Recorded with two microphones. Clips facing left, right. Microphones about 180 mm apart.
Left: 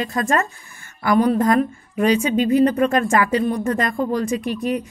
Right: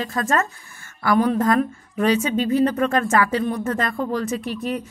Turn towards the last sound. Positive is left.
turn(degrees=15)  # may be behind; listen again after turning